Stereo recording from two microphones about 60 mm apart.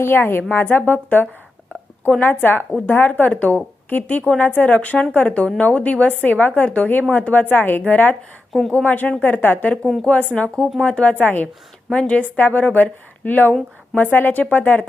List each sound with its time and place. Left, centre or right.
0.0 s a woman's voice: left
9.8 s speech: centre
10.8 s a woman's voice: left
11.9 s a woman's voice: centre